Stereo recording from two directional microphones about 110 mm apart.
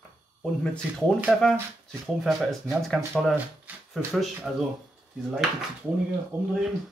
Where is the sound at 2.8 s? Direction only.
5° left (ahead or behind).